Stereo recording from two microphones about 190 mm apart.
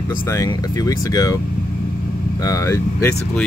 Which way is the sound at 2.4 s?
15° left (ahead or behind).